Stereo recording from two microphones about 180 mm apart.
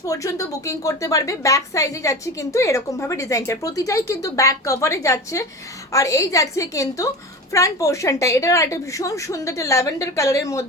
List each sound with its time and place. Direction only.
0.0 s a woman's voice: 20° left (ahead or behind)